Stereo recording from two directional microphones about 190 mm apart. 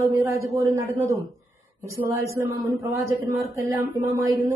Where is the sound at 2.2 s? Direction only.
15° right (ahead or behind).